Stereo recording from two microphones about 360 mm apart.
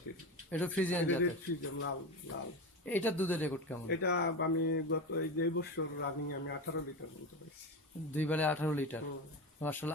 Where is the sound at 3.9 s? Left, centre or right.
Left.